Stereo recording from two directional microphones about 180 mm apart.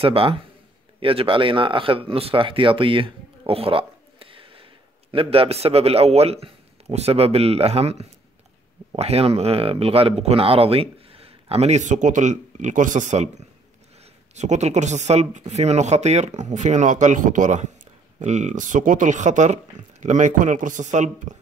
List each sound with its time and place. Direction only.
0.0 s speech: 30° right (ahead or behind)
14.3 s speech: 40° right (ahead or behind)